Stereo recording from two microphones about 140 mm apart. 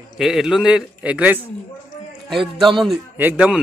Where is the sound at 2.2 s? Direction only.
Centre (ahead or behind).